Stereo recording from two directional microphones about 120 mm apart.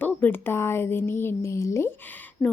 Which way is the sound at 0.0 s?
15° left (ahead or behind).